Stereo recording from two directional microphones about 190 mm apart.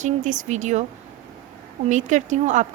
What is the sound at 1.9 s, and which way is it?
Speech, 40° right (ahead or behind).